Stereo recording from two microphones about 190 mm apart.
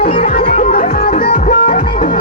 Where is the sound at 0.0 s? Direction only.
30° left (ahead or behind).